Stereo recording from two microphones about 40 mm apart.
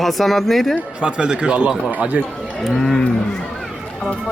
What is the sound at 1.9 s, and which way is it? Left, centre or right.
Speech, right.